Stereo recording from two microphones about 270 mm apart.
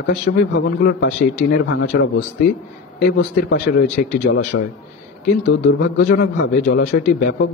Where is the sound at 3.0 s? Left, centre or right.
Left.